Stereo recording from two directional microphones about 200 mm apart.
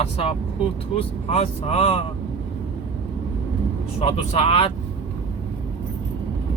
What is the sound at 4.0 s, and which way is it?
Speech, 30° left (ahead or behind).